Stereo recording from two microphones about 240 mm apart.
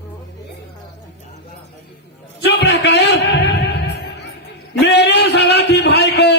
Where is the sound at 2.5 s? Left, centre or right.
Left.